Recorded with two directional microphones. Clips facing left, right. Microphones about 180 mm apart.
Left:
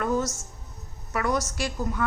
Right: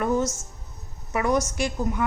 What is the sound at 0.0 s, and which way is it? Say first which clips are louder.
Music: right 2 dB; 20° right (ahead or behind).